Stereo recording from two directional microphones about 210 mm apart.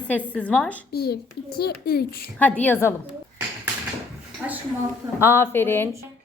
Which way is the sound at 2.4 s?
5° left (ahead or behind).